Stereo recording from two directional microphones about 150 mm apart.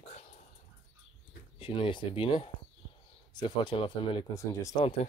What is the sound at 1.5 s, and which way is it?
Speech, 35° left (ahead or behind).